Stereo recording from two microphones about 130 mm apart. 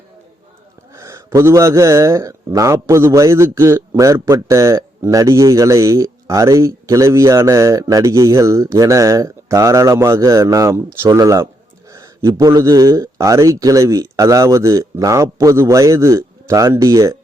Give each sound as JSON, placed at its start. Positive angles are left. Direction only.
{"t": 0.9, "sound": "speech", "side_deg": -25}